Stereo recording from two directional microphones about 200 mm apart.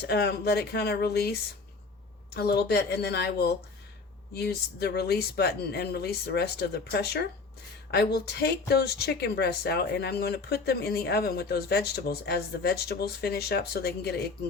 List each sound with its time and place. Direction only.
0.0 s speech: 55° left (ahead or behind)